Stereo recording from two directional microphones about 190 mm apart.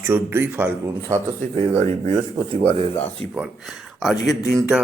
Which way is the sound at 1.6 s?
35° right (ahead or behind).